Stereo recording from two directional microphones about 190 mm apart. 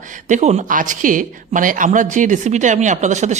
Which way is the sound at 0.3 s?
35° right (ahead or behind).